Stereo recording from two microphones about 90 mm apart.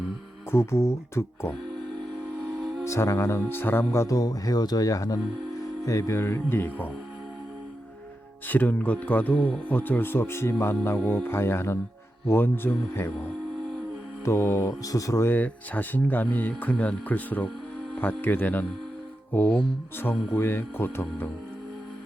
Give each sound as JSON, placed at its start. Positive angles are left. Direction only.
{"t": 0.5, "sound": "speech", "side_deg": 30}
{"t": 2.8, "sound": "speech", "side_deg": 35}
{"t": 8.4, "sound": "speech", "side_deg": 20}
{"t": 14.3, "sound": "speech", "side_deg": 30}
{"t": 15.3, "sound": "speech", "side_deg": 20}